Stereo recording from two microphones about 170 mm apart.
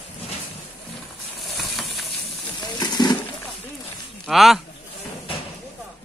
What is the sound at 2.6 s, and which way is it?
Wild animals, 25° left (ahead or behind).